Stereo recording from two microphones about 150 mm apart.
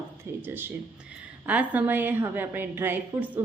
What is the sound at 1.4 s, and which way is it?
Speech, 10° right (ahead or behind).